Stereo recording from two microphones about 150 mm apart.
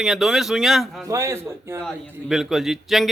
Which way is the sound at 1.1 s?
20° right (ahead or behind).